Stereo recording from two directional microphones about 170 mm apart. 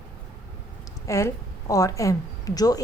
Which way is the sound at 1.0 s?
20° left (ahead or behind).